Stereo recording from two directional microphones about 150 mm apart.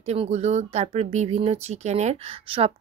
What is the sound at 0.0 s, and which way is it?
Speech, 45° right (ahead or behind).